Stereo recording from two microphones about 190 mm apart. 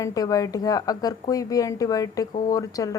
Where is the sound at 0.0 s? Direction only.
20° left (ahead or behind).